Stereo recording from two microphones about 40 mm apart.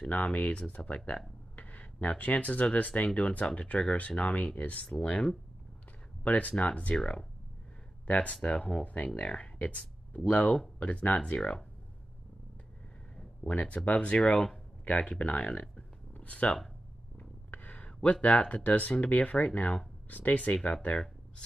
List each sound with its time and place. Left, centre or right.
0.1 s speech: left
4.9 s speech: left
6.2 s speech: left
8.1 s speech: left
13.1 s a sound: centre
13.5 s speech: left
14.2 s speech: left
15.4 s speech: left
16.2 s speech: left
17.2 s a sound: left
18.1 s speech: left